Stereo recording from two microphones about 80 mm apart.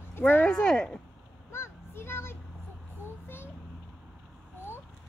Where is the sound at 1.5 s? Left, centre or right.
Left.